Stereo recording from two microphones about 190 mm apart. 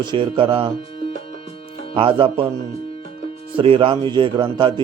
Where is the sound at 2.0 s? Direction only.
25° right (ahead or behind).